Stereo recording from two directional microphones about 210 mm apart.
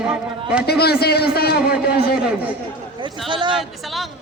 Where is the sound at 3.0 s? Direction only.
20° right (ahead or behind).